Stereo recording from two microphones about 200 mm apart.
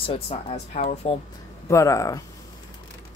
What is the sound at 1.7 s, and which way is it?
Speech, 15° left (ahead or behind).